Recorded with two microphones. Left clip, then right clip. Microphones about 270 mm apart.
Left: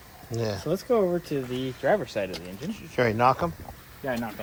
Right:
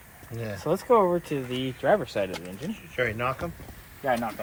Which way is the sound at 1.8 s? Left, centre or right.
Right.